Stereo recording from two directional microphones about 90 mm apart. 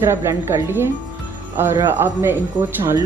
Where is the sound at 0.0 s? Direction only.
30° right (ahead or behind).